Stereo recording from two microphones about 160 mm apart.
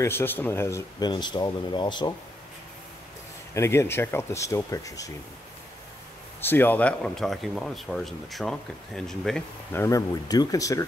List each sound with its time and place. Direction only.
0.0 s speech: 15° left (ahead or behind)
3.5 s speech: 15° left (ahead or behind)
6.4 s speech: 10° left (ahead or behind)
9.7 s speech: 15° left (ahead or behind)